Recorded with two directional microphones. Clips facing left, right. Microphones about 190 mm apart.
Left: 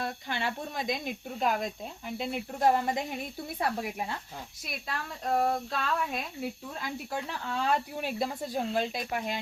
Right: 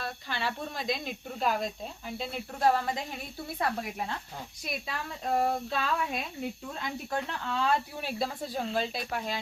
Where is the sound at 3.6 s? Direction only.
10° left (ahead or behind).